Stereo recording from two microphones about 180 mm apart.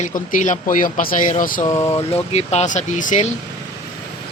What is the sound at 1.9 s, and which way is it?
Speech, 35° left (ahead or behind).